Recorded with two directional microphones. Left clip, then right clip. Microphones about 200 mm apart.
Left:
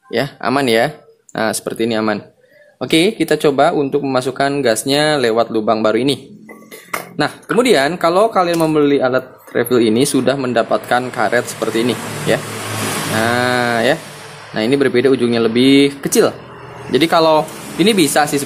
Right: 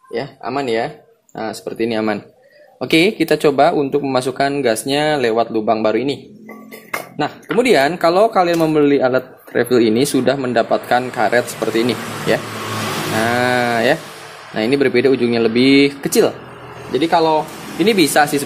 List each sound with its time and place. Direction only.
0.1 s speech: 30° left (ahead or behind)
1.8 s speech: 10° left (ahead or behind)
16.9 s speech: 30° left (ahead or behind)
17.8 s speech: 10° left (ahead or behind)